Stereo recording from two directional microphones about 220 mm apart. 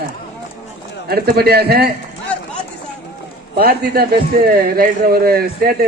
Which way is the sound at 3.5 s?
45° right (ahead or behind).